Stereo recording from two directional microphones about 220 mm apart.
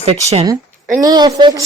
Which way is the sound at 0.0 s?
25° right (ahead or behind).